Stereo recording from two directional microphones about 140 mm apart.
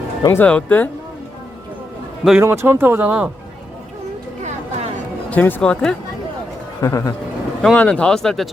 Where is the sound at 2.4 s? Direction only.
20° right (ahead or behind).